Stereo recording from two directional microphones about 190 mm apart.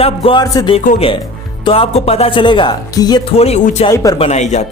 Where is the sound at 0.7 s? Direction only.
30° left (ahead or behind).